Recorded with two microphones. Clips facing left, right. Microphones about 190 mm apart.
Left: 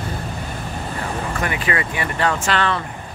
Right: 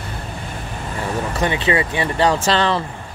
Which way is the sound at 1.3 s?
25° right (ahead or behind).